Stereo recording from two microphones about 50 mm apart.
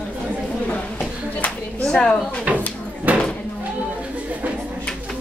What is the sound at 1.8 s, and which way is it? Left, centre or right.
Speech, left.